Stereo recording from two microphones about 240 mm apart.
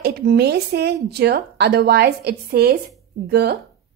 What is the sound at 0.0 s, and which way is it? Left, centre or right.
Speech, right.